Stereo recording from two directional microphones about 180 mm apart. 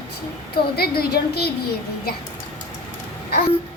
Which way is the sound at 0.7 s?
60° left (ahead or behind).